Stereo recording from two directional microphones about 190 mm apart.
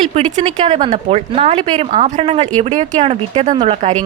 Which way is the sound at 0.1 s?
35° right (ahead or behind).